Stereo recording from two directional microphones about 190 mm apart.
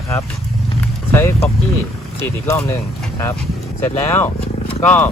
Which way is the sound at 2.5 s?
15° left (ahead or behind).